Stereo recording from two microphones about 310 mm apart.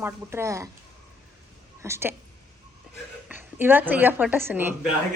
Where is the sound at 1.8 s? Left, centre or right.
Centre.